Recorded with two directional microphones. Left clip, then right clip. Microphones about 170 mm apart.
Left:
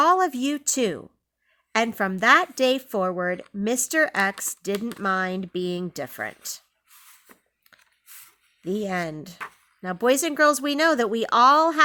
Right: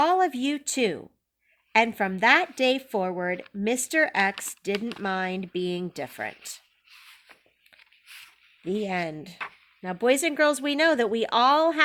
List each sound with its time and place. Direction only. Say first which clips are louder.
0.0 s speech: left 3 dB; 50° left (ahead or behind)
8.6 s speech: left 1 dB; 50° left (ahead or behind)